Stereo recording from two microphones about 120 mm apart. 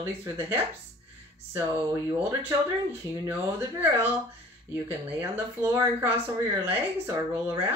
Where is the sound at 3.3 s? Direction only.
15° right (ahead or behind).